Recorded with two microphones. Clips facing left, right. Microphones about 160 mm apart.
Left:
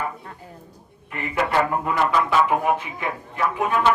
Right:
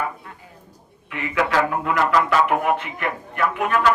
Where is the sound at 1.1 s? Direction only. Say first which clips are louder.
Right 1 dB; 90° right; by 3.8 s 70° right (ahead or behind).